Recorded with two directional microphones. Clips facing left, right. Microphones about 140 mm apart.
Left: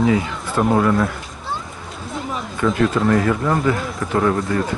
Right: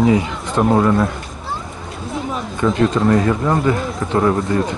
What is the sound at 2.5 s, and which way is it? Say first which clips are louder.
Speech: right 2 dB; 20° right (ahead or behind).